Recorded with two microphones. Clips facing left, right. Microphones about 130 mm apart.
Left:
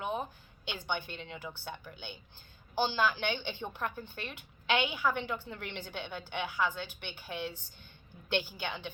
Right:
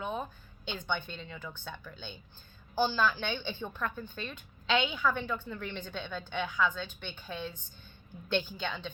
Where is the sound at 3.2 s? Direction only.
15° left (ahead or behind).